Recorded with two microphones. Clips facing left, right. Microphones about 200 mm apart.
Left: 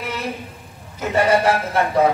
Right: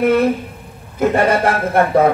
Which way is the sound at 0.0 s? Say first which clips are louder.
Right 14 dB; 55° right (ahead or behind).